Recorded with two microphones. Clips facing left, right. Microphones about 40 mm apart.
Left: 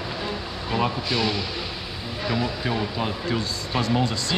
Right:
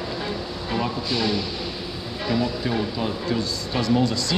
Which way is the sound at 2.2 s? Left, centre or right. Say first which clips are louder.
Right 2 dB; centre.